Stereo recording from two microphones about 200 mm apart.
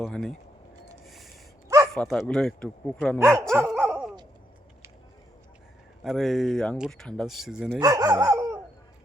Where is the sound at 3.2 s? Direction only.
15° right (ahead or behind).